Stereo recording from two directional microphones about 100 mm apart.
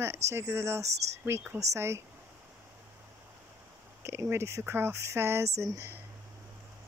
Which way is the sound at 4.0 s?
25° right (ahead or behind).